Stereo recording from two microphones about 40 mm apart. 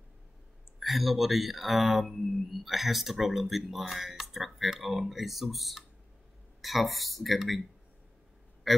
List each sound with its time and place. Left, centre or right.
0.7 s speech: centre
8.6 s a man's voice: centre